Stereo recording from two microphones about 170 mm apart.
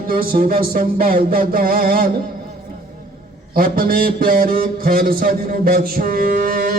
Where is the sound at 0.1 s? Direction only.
60° right (ahead or behind).